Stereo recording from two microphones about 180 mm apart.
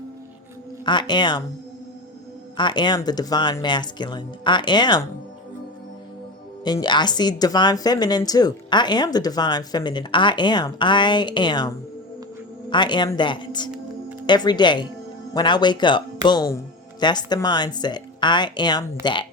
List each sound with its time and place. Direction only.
0.9 s speech: 25° left (ahead or behind)
2.6 s speech: 25° left (ahead or behind)
6.7 s speech: 25° left (ahead or behind)
12.7 s speech: 25° left (ahead or behind)